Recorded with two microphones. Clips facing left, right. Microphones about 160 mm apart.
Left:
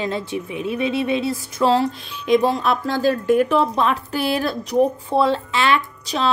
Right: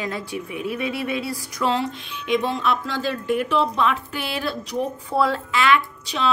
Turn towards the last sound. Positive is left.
turn(degrees=40)  # may be behind; listen again after turning